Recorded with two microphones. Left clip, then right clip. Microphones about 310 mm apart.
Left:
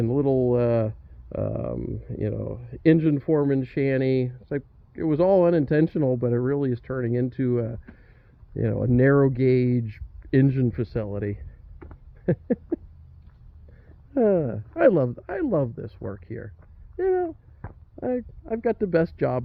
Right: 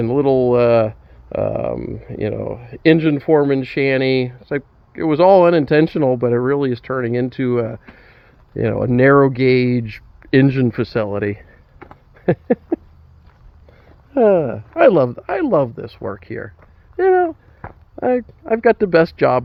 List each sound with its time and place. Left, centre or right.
0.0 s speech: centre
12.1 s a sound: centre
14.1 s speech: centre